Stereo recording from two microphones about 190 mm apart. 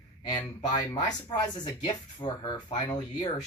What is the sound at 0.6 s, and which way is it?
Speech, 20° left (ahead or behind).